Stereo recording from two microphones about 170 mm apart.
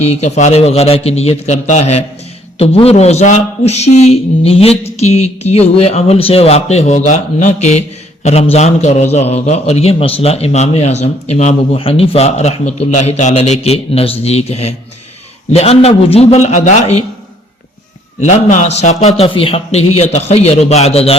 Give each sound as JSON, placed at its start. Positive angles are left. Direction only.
{"t": 0.0, "sound": "a man's voice", "side_deg": 40}
{"t": 18.2, "sound": "a man's voice", "side_deg": 45}